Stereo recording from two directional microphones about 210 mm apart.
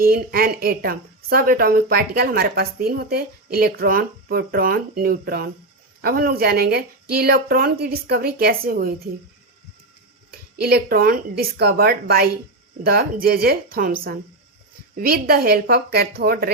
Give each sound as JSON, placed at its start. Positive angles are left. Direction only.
{"t": 0.0, "sound": "a woman's voice", "side_deg": -45}
{"t": 10.6, "sound": "a woman's voice", "side_deg": -50}